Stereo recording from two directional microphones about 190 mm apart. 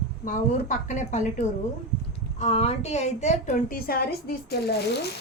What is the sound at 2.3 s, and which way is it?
A woman's voice, 35° left (ahead or behind).